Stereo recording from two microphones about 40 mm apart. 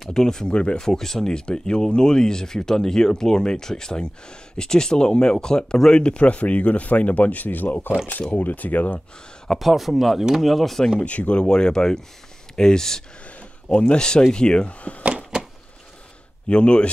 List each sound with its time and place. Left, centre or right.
0.1 s speech: centre; by 9.0 s left
9.6 s speech: centre
11.0 s speech: left
11.4 s speech: left
13.4 s speech: left
16.4 s speech: left